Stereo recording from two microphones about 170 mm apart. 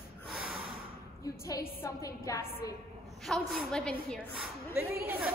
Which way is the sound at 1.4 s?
15° left (ahead or behind).